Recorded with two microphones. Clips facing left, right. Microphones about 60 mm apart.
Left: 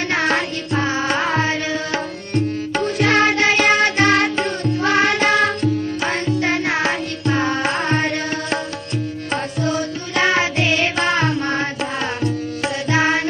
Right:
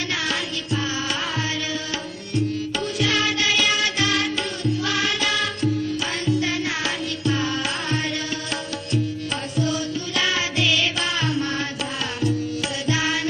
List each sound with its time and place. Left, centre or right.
0.1 s music: left